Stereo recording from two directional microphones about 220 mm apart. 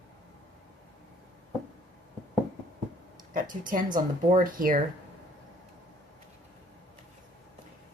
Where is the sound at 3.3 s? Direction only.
35° right (ahead or behind).